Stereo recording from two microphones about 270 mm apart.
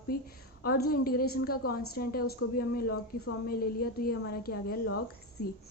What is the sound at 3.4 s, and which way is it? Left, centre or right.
A woman's voice, left.